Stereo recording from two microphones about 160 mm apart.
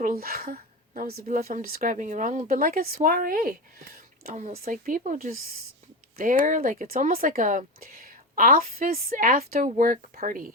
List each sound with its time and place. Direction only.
0.0 s speech: 65° right (ahead or behind)
4.6 s speech: 55° right (ahead or behind)